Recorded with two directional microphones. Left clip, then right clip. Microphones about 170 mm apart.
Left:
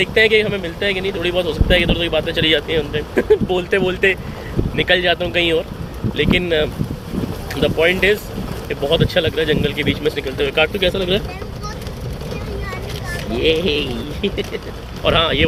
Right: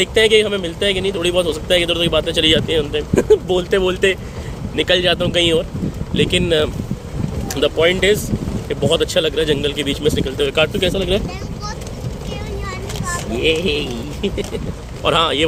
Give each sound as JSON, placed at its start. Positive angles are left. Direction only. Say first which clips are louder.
{"t": 0.0, "sound": "speech", "louder": "right 1 dB", "side_deg": -25}
{"t": 13.6, "sound": "speech", "louder": "left 1 dB", "side_deg": -5}